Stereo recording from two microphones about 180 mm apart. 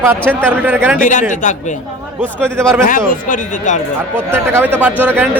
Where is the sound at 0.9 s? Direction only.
45° left (ahead or behind).